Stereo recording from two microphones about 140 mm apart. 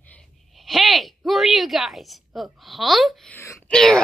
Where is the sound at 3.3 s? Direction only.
15° left (ahead or behind).